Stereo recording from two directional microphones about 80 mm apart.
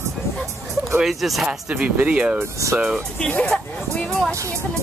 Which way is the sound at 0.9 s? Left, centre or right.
Centre.